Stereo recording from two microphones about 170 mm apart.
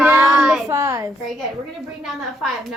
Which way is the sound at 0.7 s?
20° right (ahead or behind).